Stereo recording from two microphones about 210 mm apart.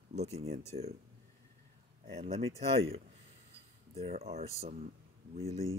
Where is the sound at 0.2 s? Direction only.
30° right (ahead or behind).